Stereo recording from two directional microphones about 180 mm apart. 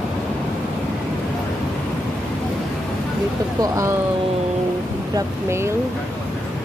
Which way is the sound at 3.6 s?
15° right (ahead or behind).